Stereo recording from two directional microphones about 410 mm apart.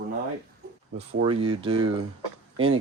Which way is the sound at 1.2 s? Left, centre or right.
Centre.